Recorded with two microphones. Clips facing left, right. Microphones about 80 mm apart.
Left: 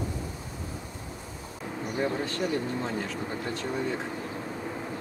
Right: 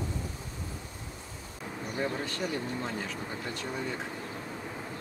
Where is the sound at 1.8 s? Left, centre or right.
Centre.